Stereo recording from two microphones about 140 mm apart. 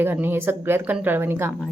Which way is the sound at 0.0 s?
15° right (ahead or behind).